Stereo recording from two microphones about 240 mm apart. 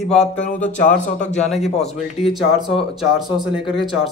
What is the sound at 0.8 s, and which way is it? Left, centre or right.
Speech, left.